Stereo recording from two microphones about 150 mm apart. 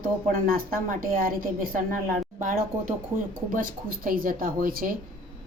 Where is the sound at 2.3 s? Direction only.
65° right (ahead or behind).